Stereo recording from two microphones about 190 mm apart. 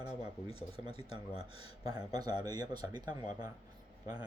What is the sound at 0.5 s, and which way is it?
Speech, 30° left (ahead or behind).